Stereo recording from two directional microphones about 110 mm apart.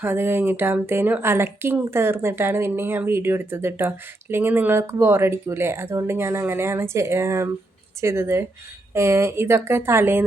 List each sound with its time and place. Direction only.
0.0 s speech: 20° right (ahead or behind)